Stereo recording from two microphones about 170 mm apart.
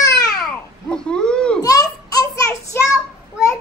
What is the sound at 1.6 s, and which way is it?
Child singing, 20° left (ahead or behind).